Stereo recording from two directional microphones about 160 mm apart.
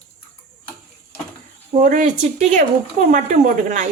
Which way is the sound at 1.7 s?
55° right (ahead or behind).